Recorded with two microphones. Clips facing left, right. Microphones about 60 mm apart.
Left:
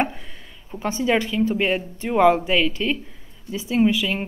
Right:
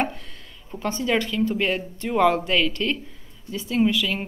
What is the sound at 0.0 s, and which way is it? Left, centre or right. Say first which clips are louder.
Speech: left 2 dB; centre.